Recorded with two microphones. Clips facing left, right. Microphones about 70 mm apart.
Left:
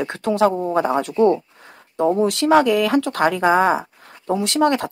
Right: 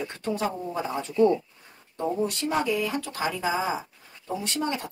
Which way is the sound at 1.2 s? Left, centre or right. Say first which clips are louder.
Left 3 dB; left.